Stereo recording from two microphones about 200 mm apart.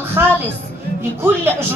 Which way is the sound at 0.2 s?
10° right (ahead or behind).